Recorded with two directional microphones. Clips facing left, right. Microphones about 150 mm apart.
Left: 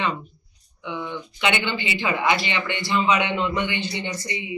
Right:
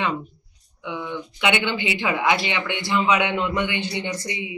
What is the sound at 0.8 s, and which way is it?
Speech, 10° right (ahead or behind).